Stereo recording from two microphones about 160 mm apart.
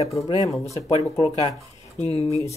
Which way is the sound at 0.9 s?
40° left (ahead or behind).